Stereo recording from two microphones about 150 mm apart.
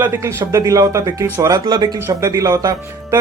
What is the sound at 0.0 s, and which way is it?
Speech, 15° right (ahead or behind).